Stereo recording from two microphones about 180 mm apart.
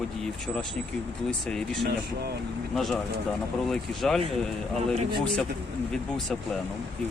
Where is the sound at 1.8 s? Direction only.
60° right (ahead or behind).